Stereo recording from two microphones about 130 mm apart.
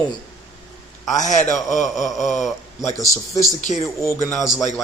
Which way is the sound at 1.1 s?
70° left (ahead or behind).